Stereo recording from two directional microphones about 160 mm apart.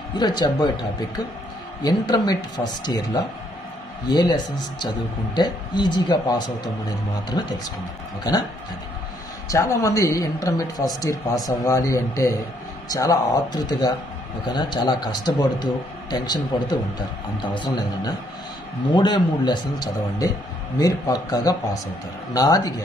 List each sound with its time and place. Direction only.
0.1 s speech: 25° left (ahead or behind)
1.8 s speech: 25° left (ahead or behind)
9.5 s speech: 20° left (ahead or behind)
17.4 s speech: 30° left (ahead or behind)